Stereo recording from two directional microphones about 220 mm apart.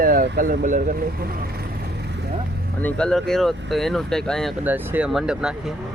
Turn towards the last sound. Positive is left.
turn(degrees=0)  # may be behind; listen again after turning